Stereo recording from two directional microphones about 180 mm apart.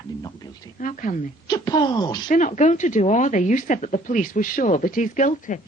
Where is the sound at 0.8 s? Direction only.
45° left (ahead or behind).